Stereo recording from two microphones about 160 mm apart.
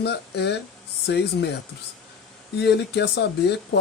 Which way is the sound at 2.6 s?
90° left.